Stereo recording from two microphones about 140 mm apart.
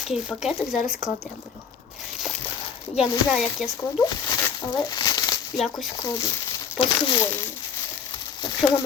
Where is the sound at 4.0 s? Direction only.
25° left (ahead or behind).